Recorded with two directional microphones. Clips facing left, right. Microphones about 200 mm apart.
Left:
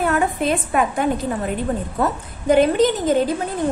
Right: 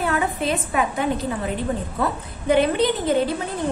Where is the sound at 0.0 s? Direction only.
50° left (ahead or behind).